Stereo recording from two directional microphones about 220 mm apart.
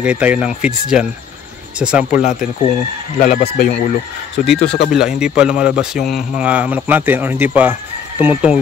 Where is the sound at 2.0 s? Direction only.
35° left (ahead or behind).